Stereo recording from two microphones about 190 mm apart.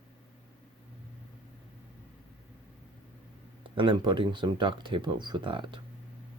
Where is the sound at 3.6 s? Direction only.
25° right (ahead or behind).